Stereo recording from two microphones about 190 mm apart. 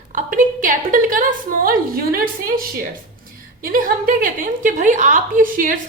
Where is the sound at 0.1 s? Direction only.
45° right (ahead or behind).